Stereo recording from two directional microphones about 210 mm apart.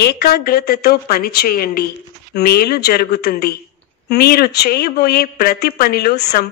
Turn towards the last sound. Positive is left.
turn(degrees=50)  # may be behind; listen again after turning